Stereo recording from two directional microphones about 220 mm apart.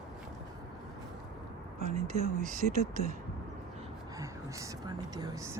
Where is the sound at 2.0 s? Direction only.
35° right (ahead or behind).